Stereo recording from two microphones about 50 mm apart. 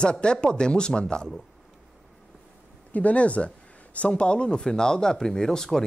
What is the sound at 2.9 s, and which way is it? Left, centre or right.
Speech, left.